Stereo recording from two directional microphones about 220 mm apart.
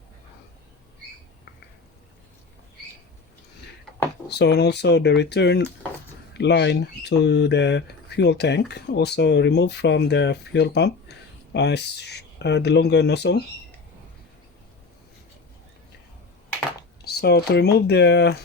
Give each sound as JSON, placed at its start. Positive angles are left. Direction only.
{"t": 4.3, "sound": "speech", "side_deg": 50}
{"t": 17.0, "sound": "speech", "side_deg": 45}